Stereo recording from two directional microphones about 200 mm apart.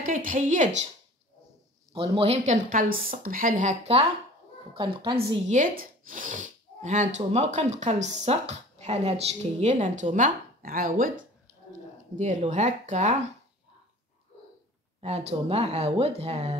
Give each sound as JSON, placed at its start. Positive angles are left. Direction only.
{"t": 0.0, "sound": "speech", "side_deg": -45}
{"t": 2.0, "sound": "speech", "side_deg": -30}
{"t": 5.5, "sound": "speech", "side_deg": -40}
{"t": 15.0, "sound": "speech", "side_deg": -35}